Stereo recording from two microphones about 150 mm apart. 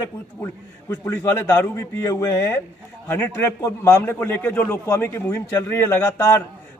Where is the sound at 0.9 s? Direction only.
15° left (ahead or behind).